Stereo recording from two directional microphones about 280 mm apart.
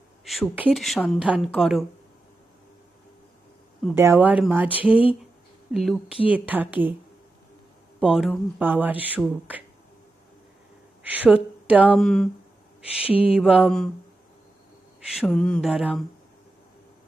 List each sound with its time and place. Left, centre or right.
0.3 s speech: centre
3.8 s speech: centre
5.7 s speech: centre
8.0 s speech: centre
11.0 s speech: centre
13.1 s a sound: centre
13.3 s speech: centre
15.1 s speech: centre